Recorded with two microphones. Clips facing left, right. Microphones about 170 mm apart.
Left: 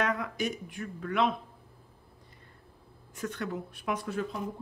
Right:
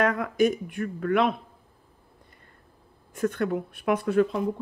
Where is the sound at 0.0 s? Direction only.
50° right (ahead or behind).